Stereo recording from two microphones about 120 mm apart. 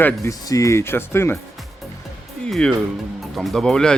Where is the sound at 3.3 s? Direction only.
Centre (ahead or behind).